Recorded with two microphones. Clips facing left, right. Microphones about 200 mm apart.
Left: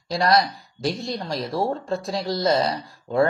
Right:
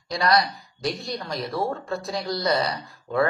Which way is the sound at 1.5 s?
25° left (ahead or behind).